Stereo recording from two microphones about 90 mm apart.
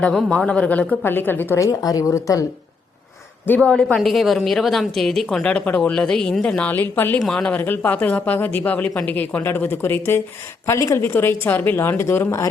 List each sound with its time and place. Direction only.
0.3 s a woman's voice: 15° left (ahead or behind)
1.6 s speech: 40° left (ahead or behind)
3.4 s speech: 20° left (ahead or behind)
3.7 s a woman's voice: 10° left (ahead or behind)
7.2 s a woman's voice: 5° left (ahead or behind)
7.5 s a woman's voice: 20° left (ahead or behind)
10.7 s speech: 35° left (ahead or behind)
11.0 s a woman's voice: 25° left (ahead or behind)